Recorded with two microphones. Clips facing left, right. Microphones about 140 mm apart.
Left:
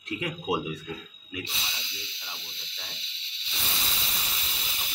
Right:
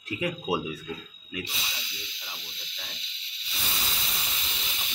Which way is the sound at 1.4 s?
Centre (ahead or behind).